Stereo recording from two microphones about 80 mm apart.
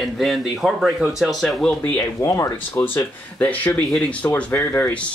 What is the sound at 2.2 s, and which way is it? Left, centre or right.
Speech, left.